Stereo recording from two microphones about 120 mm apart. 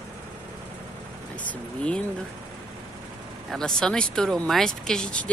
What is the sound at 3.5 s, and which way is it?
Speech, 5° left (ahead or behind).